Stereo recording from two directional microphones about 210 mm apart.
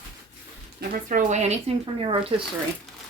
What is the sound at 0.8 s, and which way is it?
Speech, 35° right (ahead or behind).